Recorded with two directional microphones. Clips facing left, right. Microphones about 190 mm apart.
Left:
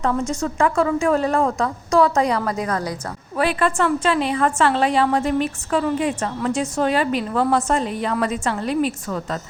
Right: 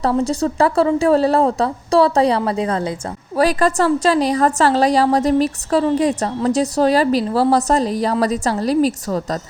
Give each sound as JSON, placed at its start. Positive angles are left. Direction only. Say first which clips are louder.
{"t": 0.0, "sound": "a woman's voice", "louder": "right 4 dB", "side_deg": -35}
{"t": 3.3, "sound": "a woman's voice", "louder": "right 4 dB", "side_deg": -40}